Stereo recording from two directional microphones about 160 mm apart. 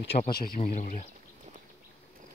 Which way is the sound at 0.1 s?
45° left (ahead or behind).